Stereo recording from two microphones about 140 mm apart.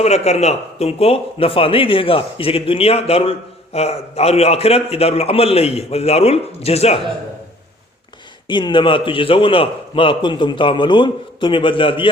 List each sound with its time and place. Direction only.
0.0 s a man's voice: 50° left (ahead or behind)
8.4 s a man's voice: 35° left (ahead or behind)